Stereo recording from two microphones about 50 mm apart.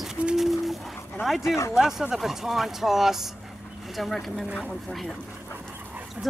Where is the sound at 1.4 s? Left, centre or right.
Left.